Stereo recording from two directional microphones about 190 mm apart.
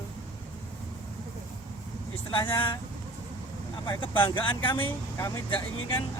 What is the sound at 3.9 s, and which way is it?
Speech, 25° left (ahead or behind).